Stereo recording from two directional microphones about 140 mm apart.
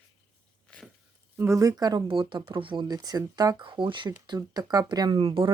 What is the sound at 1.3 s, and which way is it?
Speech, 20° right (ahead or behind).